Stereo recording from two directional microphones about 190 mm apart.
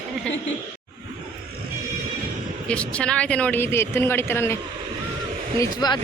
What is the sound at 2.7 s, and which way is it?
Speech, 5° left (ahead or behind).